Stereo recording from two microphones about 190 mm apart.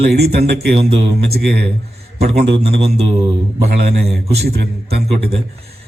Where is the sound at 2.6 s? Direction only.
30° right (ahead or behind).